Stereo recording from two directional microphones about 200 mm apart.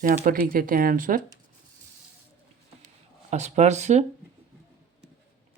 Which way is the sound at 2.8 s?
35° right (ahead or behind).